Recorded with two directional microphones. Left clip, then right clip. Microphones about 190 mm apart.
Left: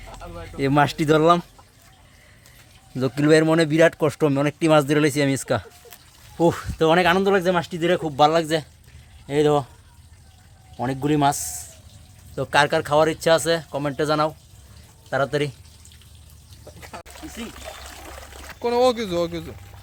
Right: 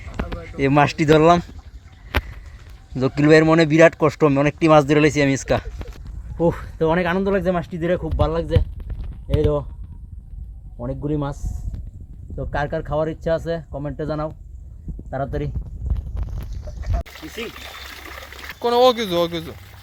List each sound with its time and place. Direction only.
0.5 s speech: 5° left (ahead or behind)
2.9 s speech: centre (ahead or behind); by 9.6 s 25° left (ahead or behind)
10.8 s speech: 30° left (ahead or behind)
18.6 s speech: 5° left (ahead or behind)